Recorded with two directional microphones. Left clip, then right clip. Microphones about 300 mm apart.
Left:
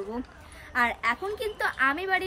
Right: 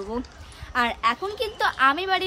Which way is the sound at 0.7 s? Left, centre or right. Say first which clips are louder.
Right 3 dB; centre.